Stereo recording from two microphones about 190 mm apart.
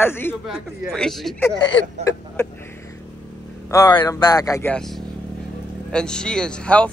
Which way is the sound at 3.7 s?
20° left (ahead or behind).